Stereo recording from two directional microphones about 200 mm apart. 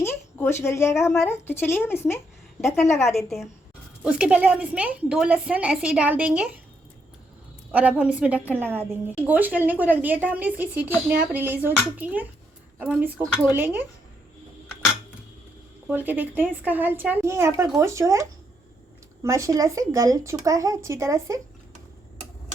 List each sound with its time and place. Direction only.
0.0 s a woman's voice: 10° left (ahead or behind)
3.1 s a woman's voice: centre (ahead or behind)
7.7 s speech: 5° right (ahead or behind)
13.2 s a woman's voice: 5° left (ahead or behind)
13.5 s speech: 10° right (ahead or behind)
15.9 s speech: 10° right (ahead or behind)